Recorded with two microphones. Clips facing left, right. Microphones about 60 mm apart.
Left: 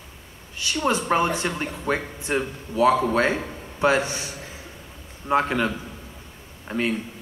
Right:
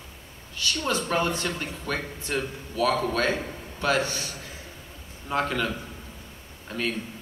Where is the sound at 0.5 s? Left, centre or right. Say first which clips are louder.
Left 4 dB; left.